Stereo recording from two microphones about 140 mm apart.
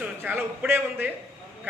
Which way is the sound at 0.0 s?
10° right (ahead or behind).